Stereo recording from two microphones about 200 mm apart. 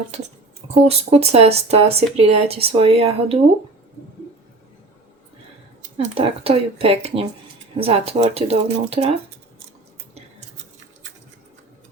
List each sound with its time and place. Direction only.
0.7 s speech: 30° right (ahead or behind)
6.1 s speech: 30° right (ahead or behind)